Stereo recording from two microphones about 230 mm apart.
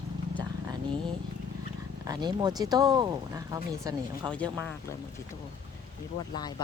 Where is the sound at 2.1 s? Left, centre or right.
Centre.